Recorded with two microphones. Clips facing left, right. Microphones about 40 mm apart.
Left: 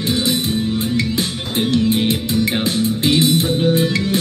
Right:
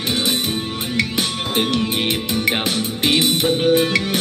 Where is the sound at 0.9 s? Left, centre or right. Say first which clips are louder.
Left 1 dB; right.